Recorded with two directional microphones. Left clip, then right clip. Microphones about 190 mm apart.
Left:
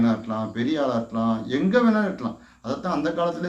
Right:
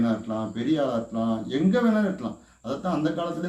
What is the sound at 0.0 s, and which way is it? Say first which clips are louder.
A man's voice: left 2 dB; 15° right (ahead or behind).